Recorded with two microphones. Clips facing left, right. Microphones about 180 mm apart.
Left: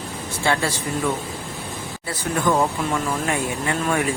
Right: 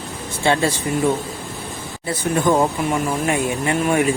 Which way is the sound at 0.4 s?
20° right (ahead or behind).